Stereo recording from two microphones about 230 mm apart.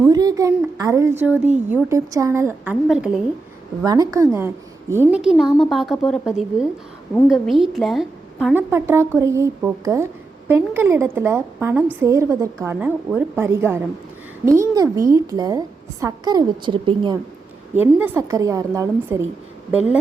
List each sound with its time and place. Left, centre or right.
0.0 s a child's voice: centre
3.8 s a woman's voice: centre
17.7 s a woman's voice: centre